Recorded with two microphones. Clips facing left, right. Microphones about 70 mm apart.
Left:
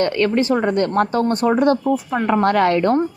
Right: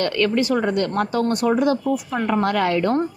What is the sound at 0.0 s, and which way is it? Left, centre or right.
A woman's voice, left.